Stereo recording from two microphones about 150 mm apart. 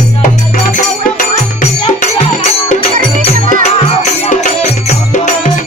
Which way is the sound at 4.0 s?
50° left (ahead or behind).